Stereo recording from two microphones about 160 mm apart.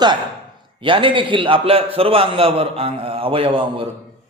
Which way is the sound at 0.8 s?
30° right (ahead or behind).